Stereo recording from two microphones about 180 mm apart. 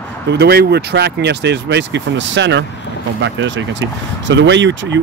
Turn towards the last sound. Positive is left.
turn(degrees=-85)